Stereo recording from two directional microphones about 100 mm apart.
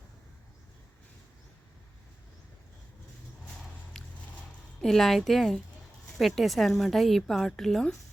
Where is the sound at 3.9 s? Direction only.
5° left (ahead or behind).